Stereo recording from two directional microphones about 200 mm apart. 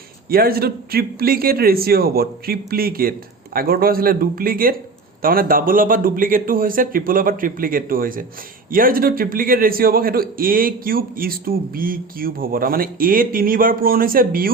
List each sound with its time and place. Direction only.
0.3 s a man's voice: 50° right (ahead or behind)